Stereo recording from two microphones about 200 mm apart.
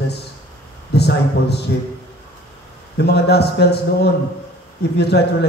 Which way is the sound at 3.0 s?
55° left (ahead or behind).